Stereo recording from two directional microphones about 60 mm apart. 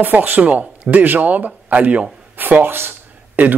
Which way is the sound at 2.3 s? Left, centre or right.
Right.